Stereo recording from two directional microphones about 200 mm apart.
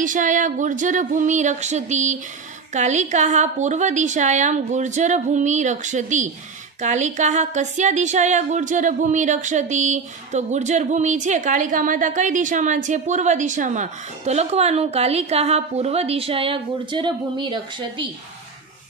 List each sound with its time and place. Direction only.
0.0 s speech: 40° right (ahead or behind); by 18.0 s 25° right (ahead or behind)